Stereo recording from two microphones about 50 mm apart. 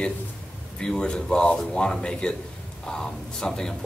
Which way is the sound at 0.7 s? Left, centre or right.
Centre.